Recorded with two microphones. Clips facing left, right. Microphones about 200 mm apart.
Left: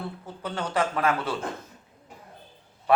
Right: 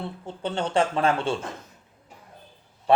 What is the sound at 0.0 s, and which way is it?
A man's voice, 25° right (ahead or behind).